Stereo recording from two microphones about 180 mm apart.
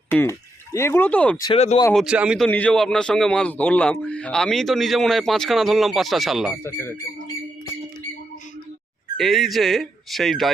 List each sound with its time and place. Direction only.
0.1 s speech: 15° left (ahead or behind)
1.5 s speech: 35° left (ahead or behind)
1.9 s a man's voice: centre (ahead or behind)
2.5 s a man's voice: 10° left (ahead or behind)
6.6 s speech: 15° left (ahead or behind)
9.1 s a man's voice: centre (ahead or behind)